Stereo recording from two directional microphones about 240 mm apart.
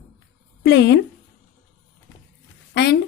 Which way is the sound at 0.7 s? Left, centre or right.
Left.